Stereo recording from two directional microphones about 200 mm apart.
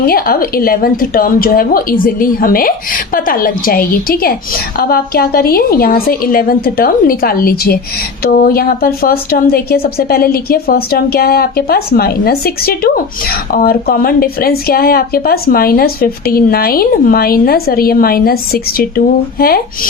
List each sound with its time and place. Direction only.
0.0 s a woman's voice: 50° left (ahead or behind)